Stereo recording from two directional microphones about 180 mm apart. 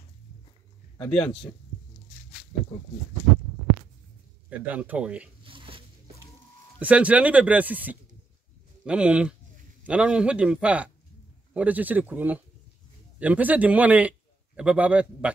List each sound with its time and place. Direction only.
0.9 s a man's voice: 5° left (ahead or behind)
4.5 s speech: 10° right (ahead or behind)
5.4 s a sound: 30° right (ahead or behind)
6.8 s a man's voice: 5° right (ahead or behind)